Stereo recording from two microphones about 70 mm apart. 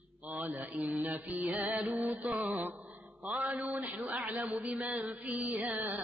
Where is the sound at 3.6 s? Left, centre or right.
Right.